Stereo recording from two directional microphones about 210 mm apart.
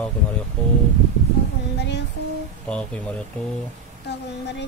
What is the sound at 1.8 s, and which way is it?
Female singing, 55° left (ahead or behind).